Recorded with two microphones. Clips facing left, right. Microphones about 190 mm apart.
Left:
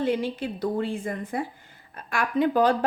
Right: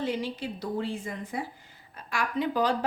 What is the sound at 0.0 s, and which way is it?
A woman's voice, 55° left (ahead or behind).